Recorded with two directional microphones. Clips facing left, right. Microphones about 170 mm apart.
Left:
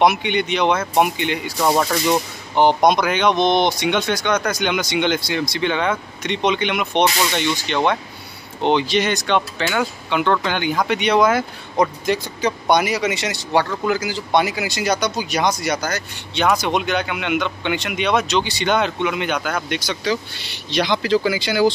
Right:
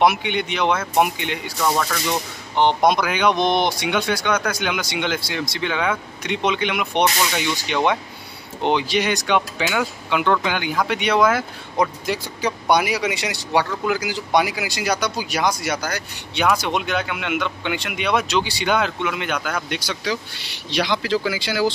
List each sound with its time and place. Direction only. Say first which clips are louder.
0.0 s speech: left 2 dB; 5° right (ahead or behind)
1.6 s speech: left 4 dB; 25° left (ahead or behind)
2.5 s speech: left 3 dB; 5° left (ahead or behind)
2.8 s speech: left 2 dB; 5° right (ahead or behind)